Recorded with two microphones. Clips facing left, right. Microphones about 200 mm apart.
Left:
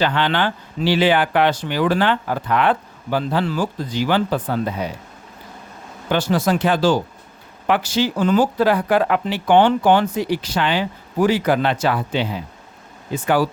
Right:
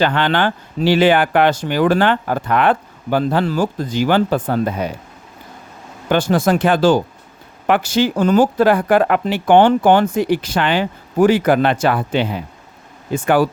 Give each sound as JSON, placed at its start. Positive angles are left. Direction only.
{"t": 0.0, "sound": "speech", "side_deg": -50}
{"t": 6.1, "sound": "speech", "side_deg": -50}